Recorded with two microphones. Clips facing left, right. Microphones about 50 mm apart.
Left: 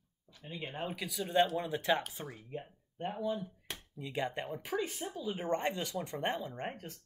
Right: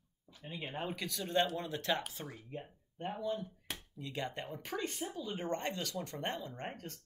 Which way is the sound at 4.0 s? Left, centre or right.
Centre.